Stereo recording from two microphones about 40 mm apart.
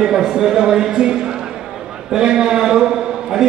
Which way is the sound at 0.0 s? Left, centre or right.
Centre.